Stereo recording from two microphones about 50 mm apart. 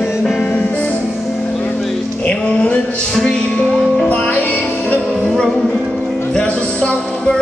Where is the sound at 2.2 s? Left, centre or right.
Left.